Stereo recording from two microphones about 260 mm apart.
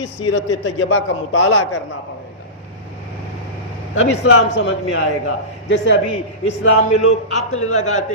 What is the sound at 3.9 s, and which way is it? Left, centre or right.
A man's voice, left.